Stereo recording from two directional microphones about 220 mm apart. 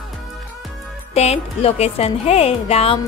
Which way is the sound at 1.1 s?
30° left (ahead or behind).